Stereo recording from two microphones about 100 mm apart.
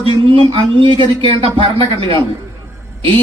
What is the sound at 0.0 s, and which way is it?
Speech, 70° right (ahead or behind).